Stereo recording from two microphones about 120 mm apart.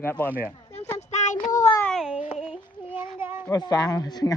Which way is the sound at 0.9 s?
85° left.